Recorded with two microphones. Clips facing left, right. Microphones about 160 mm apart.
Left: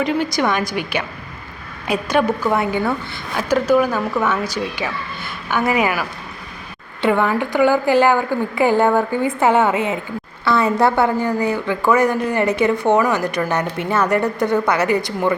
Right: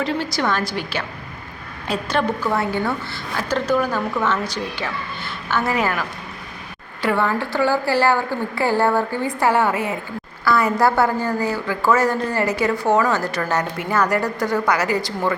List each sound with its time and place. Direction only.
0.0 s a woman's voice: 15° left (ahead or behind)